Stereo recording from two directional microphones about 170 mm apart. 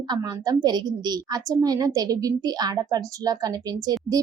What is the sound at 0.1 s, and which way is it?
A woman's voice, 20° right (ahead or behind).